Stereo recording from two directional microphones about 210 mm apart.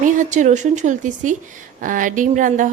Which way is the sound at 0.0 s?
35° right (ahead or behind).